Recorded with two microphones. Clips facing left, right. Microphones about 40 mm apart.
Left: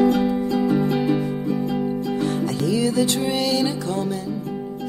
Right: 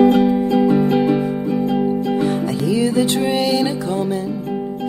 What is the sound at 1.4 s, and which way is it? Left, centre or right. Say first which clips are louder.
Music: right 6 dB; right.